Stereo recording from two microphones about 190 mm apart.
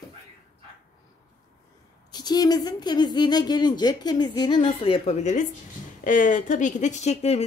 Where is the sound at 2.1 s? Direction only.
20° left (ahead or behind).